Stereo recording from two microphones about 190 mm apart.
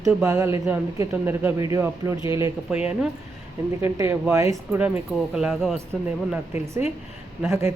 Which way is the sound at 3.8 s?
15° right (ahead or behind).